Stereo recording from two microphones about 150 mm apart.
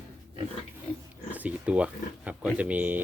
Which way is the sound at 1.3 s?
10° right (ahead or behind).